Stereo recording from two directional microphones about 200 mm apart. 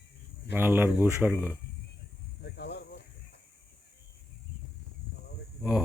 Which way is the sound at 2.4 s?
55° left (ahead or behind).